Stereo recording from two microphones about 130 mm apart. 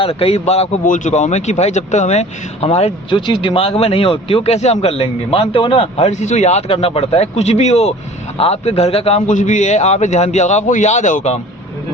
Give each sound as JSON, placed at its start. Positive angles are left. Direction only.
{"t": 0.0, "sound": "speech", "side_deg": 50}
{"t": 0.9, "sound": "a man's voice", "side_deg": 75}
{"t": 3.1, "sound": "speech", "side_deg": 40}
{"t": 6.1, "sound": "a man's voice", "side_deg": 65}
{"t": 9.2, "sound": "a man's voice", "side_deg": 75}